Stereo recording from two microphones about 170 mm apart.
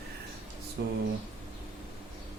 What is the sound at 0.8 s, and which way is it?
Speech, 75° right (ahead or behind).